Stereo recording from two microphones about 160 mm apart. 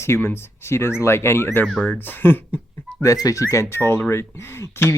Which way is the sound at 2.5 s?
10° left (ahead or behind).